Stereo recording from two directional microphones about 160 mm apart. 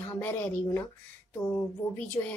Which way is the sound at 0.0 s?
15° left (ahead or behind).